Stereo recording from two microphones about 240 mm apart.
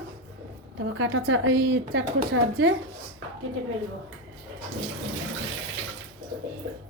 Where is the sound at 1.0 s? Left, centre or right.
Right.